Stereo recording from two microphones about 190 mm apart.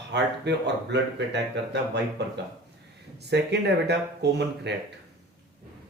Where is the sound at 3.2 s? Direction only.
60° right (ahead or behind).